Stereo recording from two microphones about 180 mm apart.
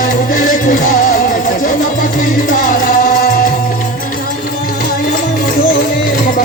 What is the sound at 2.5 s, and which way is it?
Music, 50° left (ahead or behind).